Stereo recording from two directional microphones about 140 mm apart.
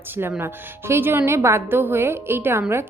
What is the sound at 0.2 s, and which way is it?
A woman's voice, 15° right (ahead or behind).